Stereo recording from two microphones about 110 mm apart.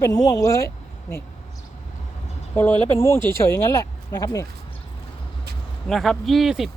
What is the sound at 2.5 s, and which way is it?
Speech, 15° left (ahead or behind).